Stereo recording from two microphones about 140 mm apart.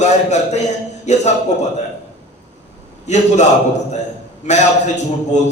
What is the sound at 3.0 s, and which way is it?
Speech, 55° left (ahead or behind).